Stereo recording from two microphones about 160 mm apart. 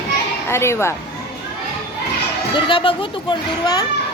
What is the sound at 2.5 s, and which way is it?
Speech, 30° left (ahead or behind).